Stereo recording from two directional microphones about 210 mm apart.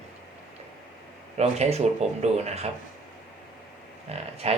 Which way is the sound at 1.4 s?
30° right (ahead or behind).